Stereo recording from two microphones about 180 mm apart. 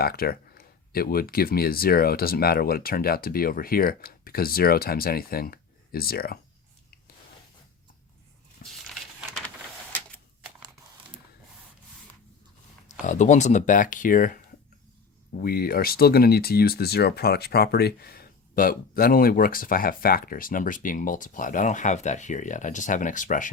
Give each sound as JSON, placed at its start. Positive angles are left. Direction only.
{"t": 0.0, "sound": "speech", "side_deg": 55}
{"t": 8.6, "sound": "a sound", "side_deg": 0}
{"t": 13.1, "sound": "speech", "side_deg": 40}